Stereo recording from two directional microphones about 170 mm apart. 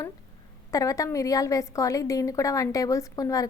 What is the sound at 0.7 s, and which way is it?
A woman's voice, 20° left (ahead or behind).